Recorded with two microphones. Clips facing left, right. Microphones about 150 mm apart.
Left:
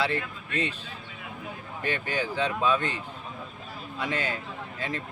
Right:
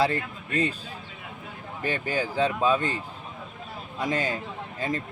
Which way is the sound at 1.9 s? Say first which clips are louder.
Right 1 dB; 35° right (ahead or behind).